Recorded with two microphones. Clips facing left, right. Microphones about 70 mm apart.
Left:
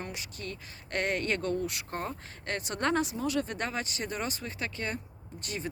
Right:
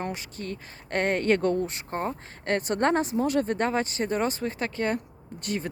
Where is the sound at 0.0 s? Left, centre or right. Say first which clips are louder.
Right 6 dB; right.